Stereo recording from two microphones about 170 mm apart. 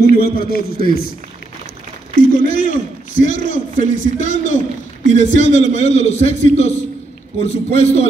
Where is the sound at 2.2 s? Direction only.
55° left (ahead or behind).